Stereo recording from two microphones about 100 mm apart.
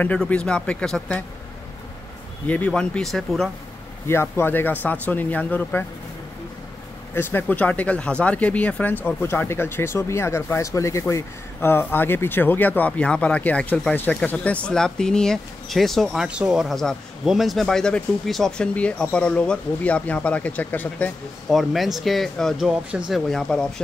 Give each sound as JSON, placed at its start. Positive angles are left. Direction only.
{"t": 0.0, "sound": "speech", "side_deg": 15}
{"t": 2.4, "sound": "speech", "side_deg": 15}
{"t": 4.1, "sound": "speech", "side_deg": 25}
{"t": 7.2, "sound": "speech", "side_deg": 20}
{"t": 21.5, "sound": "speech", "side_deg": 0}
{"t": 22.7, "sound": "speech", "side_deg": -10}
{"t": 23.3, "sound": "speech", "side_deg": 5}